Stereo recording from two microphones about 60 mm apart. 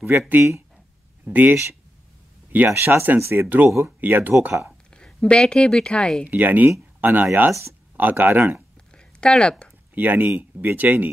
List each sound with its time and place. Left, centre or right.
0.3 s speech: right
2.7 s speech: right
4.9 s speech: centre
6.2 s speech: right
8.9 s a sound: centre
9.9 s speech: right